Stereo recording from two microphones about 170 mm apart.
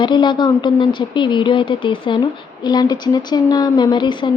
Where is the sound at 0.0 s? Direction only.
25° left (ahead or behind).